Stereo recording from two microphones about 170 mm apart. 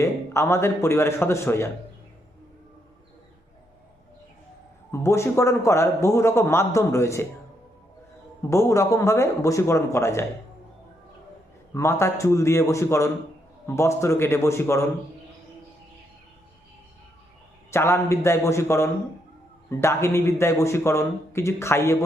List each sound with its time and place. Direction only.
0.0 s a man's voice: 15° left (ahead or behind)
4.9 s a man's voice: 15° left (ahead or behind)
8.4 s a man's voice: 15° left (ahead or behind)
11.7 s a man's voice: 15° left (ahead or behind)
17.7 s a man's voice: 15° left (ahead or behind)